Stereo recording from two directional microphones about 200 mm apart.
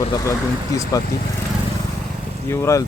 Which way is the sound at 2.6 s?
15° left (ahead or behind).